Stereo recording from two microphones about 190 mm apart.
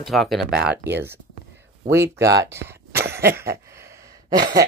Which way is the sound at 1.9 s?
15° right (ahead or behind).